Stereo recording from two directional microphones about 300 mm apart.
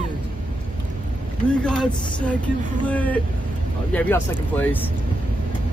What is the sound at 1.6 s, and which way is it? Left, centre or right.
Speech, centre.